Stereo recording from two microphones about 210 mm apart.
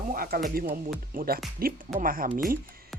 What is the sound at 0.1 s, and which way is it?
Speech, 45° right (ahead or behind).